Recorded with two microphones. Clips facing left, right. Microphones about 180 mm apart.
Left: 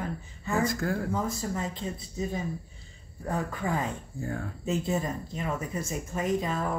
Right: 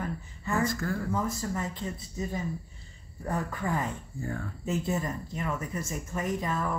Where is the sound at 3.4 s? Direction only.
15° left (ahead or behind).